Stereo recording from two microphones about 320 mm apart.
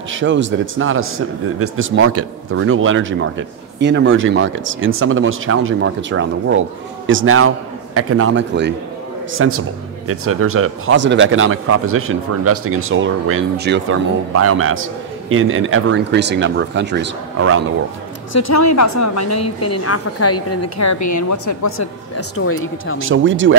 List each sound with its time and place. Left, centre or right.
0.1 s speech: right
18.3 s a woman's voice: left
23.0 s speech: right